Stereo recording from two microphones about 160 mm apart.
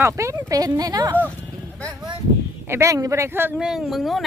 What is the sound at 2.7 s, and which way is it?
Speech, 20° right (ahead or behind).